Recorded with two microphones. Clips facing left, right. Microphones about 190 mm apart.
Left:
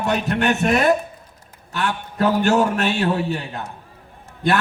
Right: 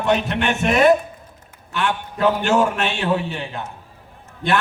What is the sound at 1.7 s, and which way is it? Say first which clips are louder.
A man's voice: even; 40° left (ahead or behind).